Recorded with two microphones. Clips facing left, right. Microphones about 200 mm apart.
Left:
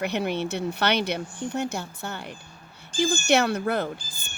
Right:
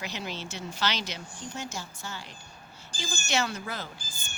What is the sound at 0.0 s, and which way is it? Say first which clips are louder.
Speech: left 11 dB; 60° left (ahead or behind).